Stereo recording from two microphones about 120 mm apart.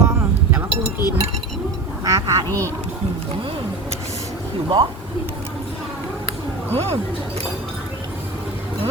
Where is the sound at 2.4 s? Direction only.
15° left (ahead or behind).